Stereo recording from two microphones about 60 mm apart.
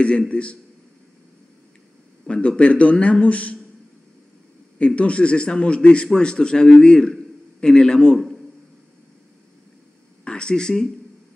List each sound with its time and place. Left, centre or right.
0.3 s a man's voice: centre
2.2 s a man's voice: centre
4.7 s a man's voice: centre
10.2 s speech: centre